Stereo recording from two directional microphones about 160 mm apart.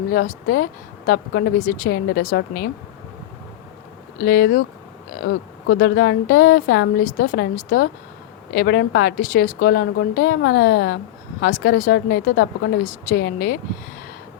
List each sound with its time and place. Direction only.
0.1 s speech: 65° left (ahead or behind)
4.2 s speech: 65° left (ahead or behind)
5.6 s speech: 70° left (ahead or behind)
8.5 s a woman's voice: 90° left
11.3 s speech: 75° left (ahead or behind)